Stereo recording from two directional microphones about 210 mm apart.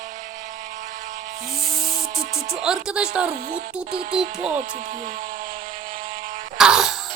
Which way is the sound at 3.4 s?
40° right (ahead or behind).